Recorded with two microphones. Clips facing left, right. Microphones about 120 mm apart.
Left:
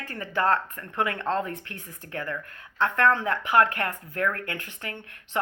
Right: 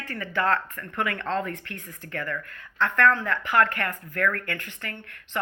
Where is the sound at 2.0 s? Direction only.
15° left (ahead or behind).